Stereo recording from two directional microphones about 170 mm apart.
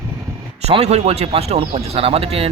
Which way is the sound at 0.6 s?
40° right (ahead or behind).